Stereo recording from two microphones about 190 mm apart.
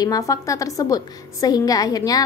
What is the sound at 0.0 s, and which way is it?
A woman's voice, 20° left (ahead or behind).